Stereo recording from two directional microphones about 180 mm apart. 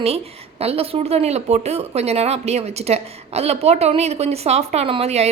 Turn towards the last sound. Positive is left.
turn(degrees=-35)  # may be behind; listen again after turning